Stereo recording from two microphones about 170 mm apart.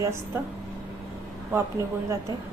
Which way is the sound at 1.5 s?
15° right (ahead or behind).